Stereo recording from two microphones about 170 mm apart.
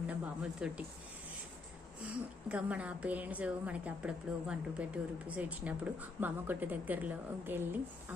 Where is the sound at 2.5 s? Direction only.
10° right (ahead or behind).